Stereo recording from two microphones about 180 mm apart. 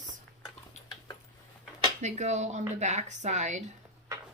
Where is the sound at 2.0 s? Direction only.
40° right (ahead or behind).